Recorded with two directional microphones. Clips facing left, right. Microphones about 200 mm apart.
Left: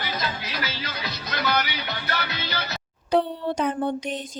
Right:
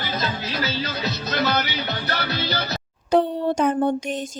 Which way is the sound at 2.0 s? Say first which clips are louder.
Right 4 dB; 40° right (ahead or behind).